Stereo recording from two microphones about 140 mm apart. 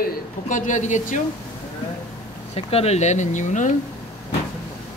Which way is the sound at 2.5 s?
45° left (ahead or behind).